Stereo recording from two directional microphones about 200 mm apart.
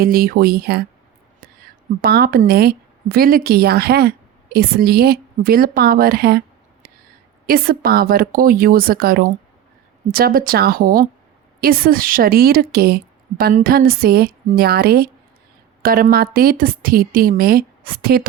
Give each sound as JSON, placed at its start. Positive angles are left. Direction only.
{"t": 0.0, "sound": "a woman's voice", "side_deg": -50}
{"t": 2.0, "sound": "a woman's voice", "side_deg": -50}
{"t": 7.4, "sound": "a woman's voice", "side_deg": -50}